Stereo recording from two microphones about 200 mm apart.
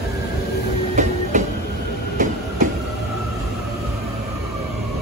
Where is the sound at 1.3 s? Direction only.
35° right (ahead or behind).